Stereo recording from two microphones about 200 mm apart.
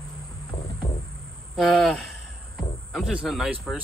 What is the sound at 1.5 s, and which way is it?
Speech, centre (ahead or behind).